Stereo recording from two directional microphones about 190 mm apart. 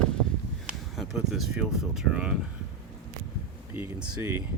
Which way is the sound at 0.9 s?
Centre (ahead or behind).